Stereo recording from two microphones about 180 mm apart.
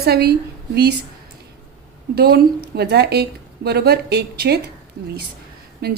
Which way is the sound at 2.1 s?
60° right (ahead or behind).